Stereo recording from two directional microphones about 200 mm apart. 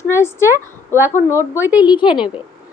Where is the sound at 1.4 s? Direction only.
10° right (ahead or behind).